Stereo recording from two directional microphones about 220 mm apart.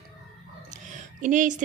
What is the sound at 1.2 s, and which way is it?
Speech, 35° right (ahead or behind).